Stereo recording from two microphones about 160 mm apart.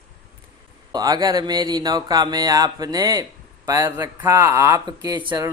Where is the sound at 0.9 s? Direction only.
25° right (ahead or behind).